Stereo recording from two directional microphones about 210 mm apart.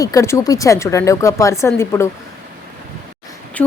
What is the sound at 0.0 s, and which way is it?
Speech, 15° left (ahead or behind).